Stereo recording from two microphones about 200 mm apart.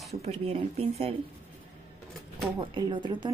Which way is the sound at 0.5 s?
30° right (ahead or behind).